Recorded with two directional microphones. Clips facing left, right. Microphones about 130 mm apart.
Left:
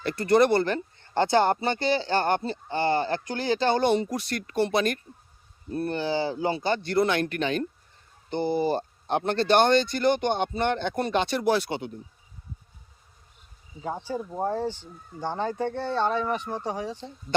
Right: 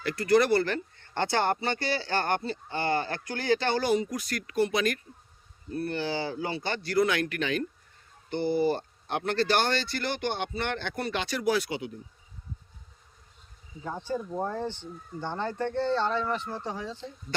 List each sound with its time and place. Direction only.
0.0 s speech: 25° left (ahead or behind)
13.8 s speech: 15° left (ahead or behind)